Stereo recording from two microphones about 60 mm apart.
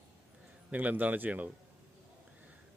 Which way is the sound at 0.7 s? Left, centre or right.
Right.